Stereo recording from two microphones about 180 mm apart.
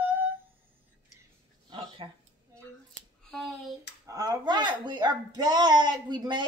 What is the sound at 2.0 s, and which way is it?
Speech, 30° right (ahead or behind).